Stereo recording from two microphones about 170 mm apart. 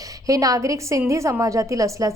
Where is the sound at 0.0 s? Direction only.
20° right (ahead or behind).